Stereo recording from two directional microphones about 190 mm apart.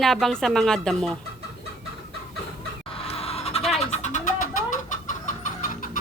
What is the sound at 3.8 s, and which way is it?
Chicken, 35° left (ahead or behind).